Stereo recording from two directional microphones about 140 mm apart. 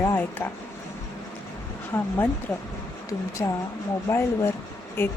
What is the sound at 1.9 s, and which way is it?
Speech, 10° left (ahead or behind).